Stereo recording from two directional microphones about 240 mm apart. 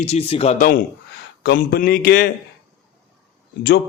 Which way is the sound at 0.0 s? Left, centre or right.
Left.